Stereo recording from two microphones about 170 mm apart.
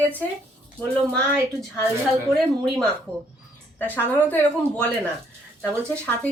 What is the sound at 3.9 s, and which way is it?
Speech, 10° left (ahead or behind).